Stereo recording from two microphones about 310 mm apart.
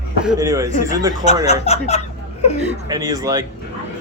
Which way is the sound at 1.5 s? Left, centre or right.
Left.